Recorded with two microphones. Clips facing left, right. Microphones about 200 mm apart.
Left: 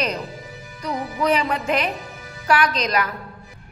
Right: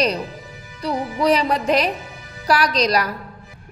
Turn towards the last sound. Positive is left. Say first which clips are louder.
# right 3 dB
turn(degrees=-35)  # may be behind; listen again after turning